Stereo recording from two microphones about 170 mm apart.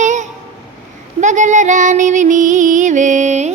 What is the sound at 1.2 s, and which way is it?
Music, 45° right (ahead or behind).